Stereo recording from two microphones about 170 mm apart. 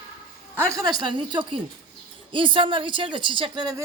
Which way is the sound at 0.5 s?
15° right (ahead or behind).